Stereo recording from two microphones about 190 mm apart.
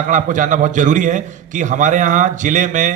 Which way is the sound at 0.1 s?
40° right (ahead or behind).